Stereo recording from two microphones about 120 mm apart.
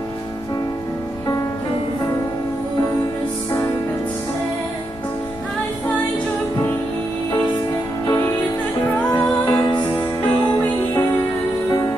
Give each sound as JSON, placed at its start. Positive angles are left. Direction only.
{"t": 9.1, "sound": "music", "side_deg": 35}